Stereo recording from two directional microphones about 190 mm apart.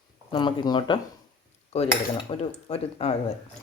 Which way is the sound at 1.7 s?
35° left (ahead or behind).